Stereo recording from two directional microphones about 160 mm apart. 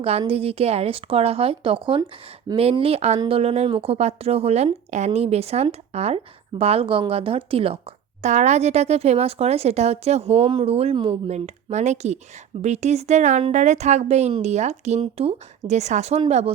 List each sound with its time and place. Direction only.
0.0 s speech: 40° right (ahead or behind)
11.3 s speech: 45° right (ahead or behind)